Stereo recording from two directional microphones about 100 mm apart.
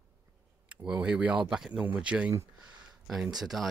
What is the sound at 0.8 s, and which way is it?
Speech, 10° right (ahead or behind).